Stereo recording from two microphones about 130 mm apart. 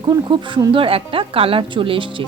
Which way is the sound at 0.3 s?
40° right (ahead or behind).